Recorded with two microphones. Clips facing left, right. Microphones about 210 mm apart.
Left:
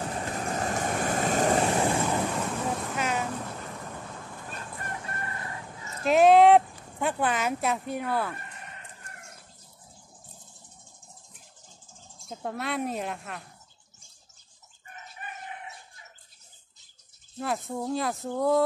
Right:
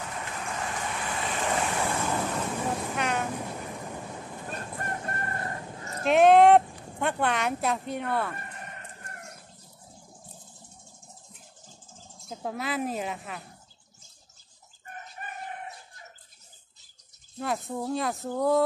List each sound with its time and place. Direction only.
0.0 s waves: 35° left (ahead or behind)
2.5 s vehicle: 5° right (ahead or behind)
3.3 s vehicle: 15° right (ahead or behind)
4.5 s chicken: 45° right (ahead or behind)
6.0 s a sound: centre (ahead or behind)
12.3 s speech: centre (ahead or behind)
15.2 s chicken: 45° right (ahead or behind)
17.4 s speech: centre (ahead or behind)